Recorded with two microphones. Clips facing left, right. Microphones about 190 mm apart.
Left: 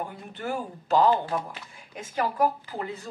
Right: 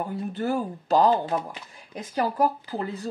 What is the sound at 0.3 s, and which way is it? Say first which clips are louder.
Speech: right 5 dB; 35° right (ahead or behind).